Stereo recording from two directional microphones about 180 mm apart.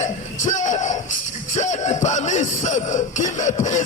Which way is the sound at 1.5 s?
40° left (ahead or behind).